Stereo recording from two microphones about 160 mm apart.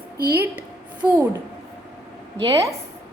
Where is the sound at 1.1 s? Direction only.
15° right (ahead or behind).